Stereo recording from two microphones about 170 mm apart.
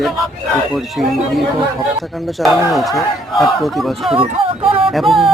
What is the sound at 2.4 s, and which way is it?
Speech, centre (ahead or behind).